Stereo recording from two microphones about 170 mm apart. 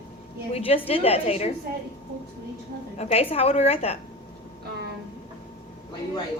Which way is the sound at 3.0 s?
35° left (ahead or behind).